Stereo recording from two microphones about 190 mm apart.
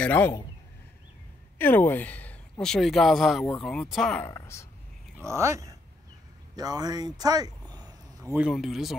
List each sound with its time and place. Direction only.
0.0 s a man's voice: 10° left (ahead or behind)
1.6 s speech: 10° left (ahead or behind)
4.3 s a man's voice: 15° left (ahead or behind)
5.2 s speech: 15° right (ahead or behind)
8.3 s speech: 5° right (ahead or behind)